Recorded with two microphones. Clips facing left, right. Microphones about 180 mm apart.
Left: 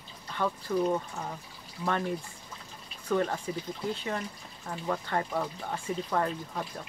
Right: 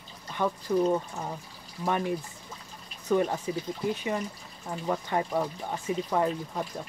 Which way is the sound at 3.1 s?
15° right (ahead or behind).